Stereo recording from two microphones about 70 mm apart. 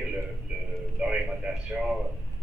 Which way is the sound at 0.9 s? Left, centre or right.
Centre.